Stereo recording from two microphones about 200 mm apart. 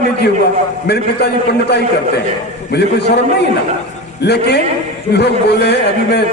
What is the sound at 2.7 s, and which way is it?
Speech, 55° left (ahead or behind).